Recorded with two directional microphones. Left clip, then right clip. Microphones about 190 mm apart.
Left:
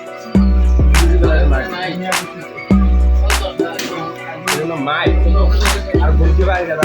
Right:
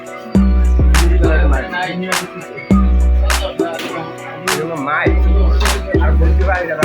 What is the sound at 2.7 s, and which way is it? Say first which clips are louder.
Music: right 1 dB; centre (ahead or behind).